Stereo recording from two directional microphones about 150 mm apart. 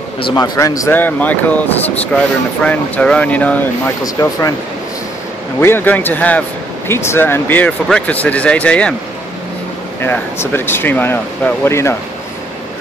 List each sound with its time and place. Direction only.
0.2 s speech: 25° left (ahead or behind)
4.0 s speech: 20° left (ahead or behind)
5.6 s speech: 15° left (ahead or behind)
10.0 s speech: 15° left (ahead or behind)